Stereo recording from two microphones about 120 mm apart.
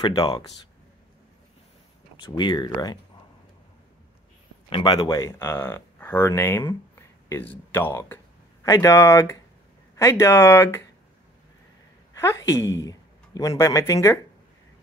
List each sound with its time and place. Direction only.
0.0 s speech: 40° left (ahead or behind)
2.1 s speech: 40° left (ahead or behind)
4.6 s a man's voice: 45° left (ahead or behind)
4.9 s speech: 35° left (ahead or behind)
5.5 s speech: 20° left (ahead or behind)
12.2 s a woman's voice: 25° left (ahead or behind)